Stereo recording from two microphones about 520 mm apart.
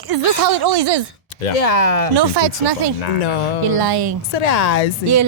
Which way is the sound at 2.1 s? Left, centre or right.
Right.